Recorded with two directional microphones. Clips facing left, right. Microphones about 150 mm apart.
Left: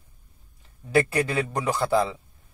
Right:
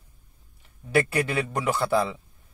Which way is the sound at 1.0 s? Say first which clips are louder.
Left 1 dB; 30° left (ahead or behind).